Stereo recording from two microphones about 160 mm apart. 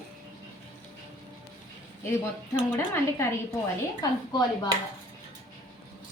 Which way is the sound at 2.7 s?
15° left (ahead or behind).